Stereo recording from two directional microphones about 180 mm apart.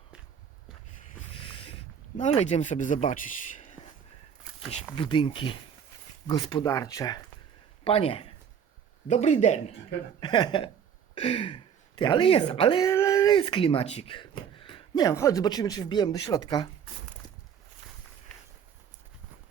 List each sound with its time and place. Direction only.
1.3 s a sound: 30° left (ahead or behind)
4.9 s speech: 25° left (ahead or behind)
7.9 s speech: 30° left (ahead or behind)
10.2 s speech: 25° left (ahead or behind)
12.8 s speech: 15° left (ahead or behind)